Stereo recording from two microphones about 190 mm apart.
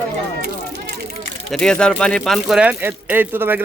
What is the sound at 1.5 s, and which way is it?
Speech, 5° left (ahead or behind).